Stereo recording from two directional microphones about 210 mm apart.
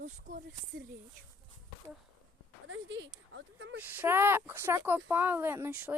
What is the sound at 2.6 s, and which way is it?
Speech, 65° right (ahead or behind).